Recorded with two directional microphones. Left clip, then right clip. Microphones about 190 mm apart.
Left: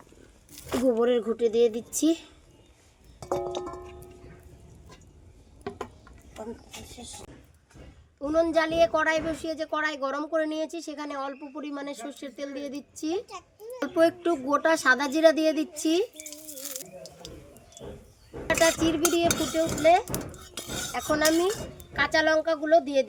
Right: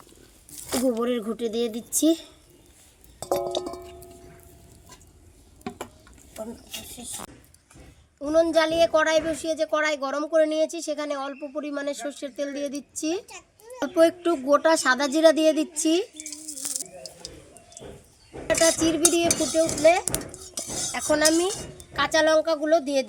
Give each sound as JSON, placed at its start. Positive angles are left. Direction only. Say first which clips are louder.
{"t": 0.5, "sound": "a sound", "louder": "right 2 dB", "side_deg": 25}
{"t": 0.9, "sound": "speech", "louder": "left 3 dB", "side_deg": -20}
{"t": 3.2, "sound": "a sound", "louder": "right 4 dB", "side_deg": -20}
{"t": 5.6, "sound": "stir", "louder": "even", "side_deg": -50}
{"t": 8.2, "sound": "a woman's voice", "louder": "right 3 dB", "side_deg": -25}
{"t": 16.1, "sound": "a sound", "louder": "right 3 dB", "side_deg": 10}
{"t": 18.6, "sound": "a woman's voice", "louder": "right 1 dB", "side_deg": -35}
{"t": 19.3, "sound": "stir", "louder": "right 4 dB", "side_deg": 0}
{"t": 19.8, "sound": "cutlery", "louder": "right 1 dB", "side_deg": -50}
{"t": 20.1, "sound": "dishes", "louder": "right 3 dB", "side_deg": 5}
{"t": 20.9, "sound": "cutlery", "louder": "right 3 dB", "side_deg": -55}
{"t": 21.9, "sound": "a woman's voice", "louder": "right 3 dB", "side_deg": -40}